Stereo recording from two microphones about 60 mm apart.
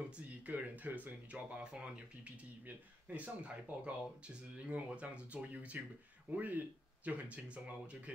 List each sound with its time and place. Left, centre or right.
0.5 s speech: right